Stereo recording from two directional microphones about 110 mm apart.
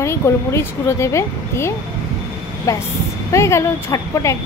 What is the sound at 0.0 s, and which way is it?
A woman's voice, 25° left (ahead or behind).